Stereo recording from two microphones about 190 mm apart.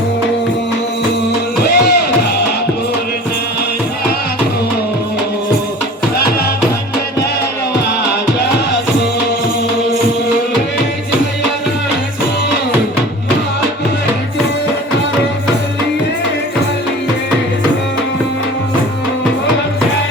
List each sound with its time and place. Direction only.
1.7 s music: 60° left (ahead or behind)